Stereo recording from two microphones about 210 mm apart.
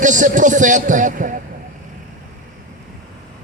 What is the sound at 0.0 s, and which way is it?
A man's voice, 35° right (ahead or behind).